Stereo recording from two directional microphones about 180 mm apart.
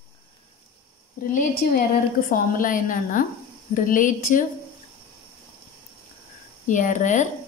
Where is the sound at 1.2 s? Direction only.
50° left (ahead or behind).